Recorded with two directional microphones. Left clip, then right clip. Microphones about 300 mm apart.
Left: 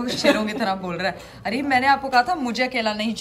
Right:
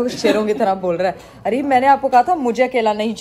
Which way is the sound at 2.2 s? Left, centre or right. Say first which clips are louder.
Right 7 dB; left.